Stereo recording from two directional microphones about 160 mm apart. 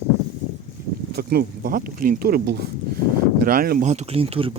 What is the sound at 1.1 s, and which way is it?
Speech, 75° right (ahead or behind).